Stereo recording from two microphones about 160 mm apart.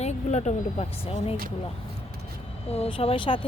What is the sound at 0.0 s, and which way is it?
Speech, 45° left (ahead or behind).